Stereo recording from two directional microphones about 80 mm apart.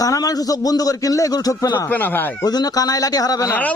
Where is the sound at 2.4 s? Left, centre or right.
Left.